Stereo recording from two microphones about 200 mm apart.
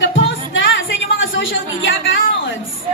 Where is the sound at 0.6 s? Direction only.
70° left (ahead or behind).